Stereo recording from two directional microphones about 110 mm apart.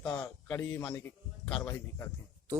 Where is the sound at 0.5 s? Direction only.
20° left (ahead or behind).